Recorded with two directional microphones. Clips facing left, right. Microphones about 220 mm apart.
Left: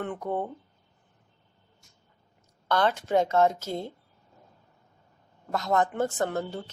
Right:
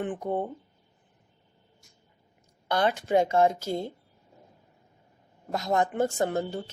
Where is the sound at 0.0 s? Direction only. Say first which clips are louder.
Right 1 dB; 15° right (ahead or behind).